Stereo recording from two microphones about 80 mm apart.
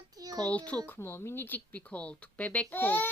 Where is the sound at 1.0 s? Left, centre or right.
Left.